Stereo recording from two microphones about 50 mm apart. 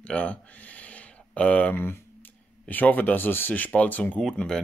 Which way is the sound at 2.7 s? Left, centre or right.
Left.